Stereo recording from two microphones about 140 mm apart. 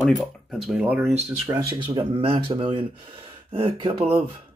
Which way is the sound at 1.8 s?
35° right (ahead or behind).